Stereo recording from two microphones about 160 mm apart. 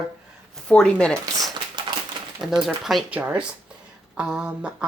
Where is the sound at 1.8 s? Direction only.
30° right (ahead or behind).